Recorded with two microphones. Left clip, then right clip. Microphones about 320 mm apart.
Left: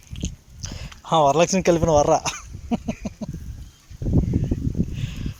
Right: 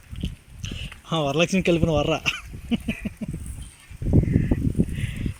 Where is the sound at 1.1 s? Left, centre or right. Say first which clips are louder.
Left 6 dB; centre.